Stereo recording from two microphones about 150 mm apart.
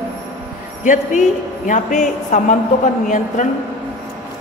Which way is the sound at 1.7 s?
55° left (ahead or behind).